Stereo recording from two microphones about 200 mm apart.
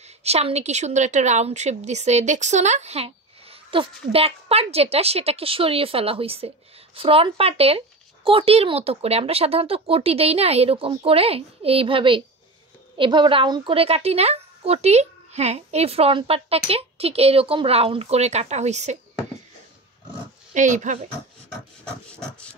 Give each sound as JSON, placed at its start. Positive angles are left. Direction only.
{"t": 0.2, "sound": "a woman's voice", "side_deg": -30}
{"t": 20.5, "sound": "a woman's voice", "side_deg": -40}
{"t": 21.8, "sound": "hiss", "side_deg": 5}